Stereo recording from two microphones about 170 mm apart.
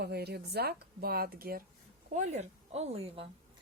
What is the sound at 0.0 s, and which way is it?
Speech, 70° right (ahead or behind).